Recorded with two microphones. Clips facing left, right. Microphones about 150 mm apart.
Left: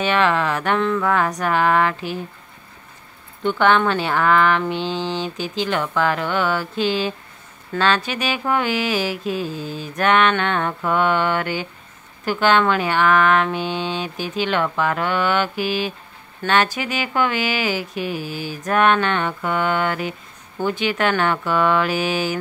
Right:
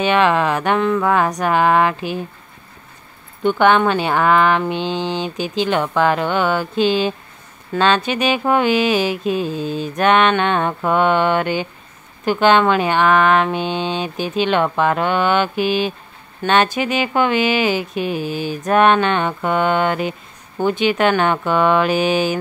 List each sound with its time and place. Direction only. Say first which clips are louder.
0.0 s speech: right 3 dB; 15° right (ahead or behind)
3.4 s speech: right 3 dB; 15° right (ahead or behind)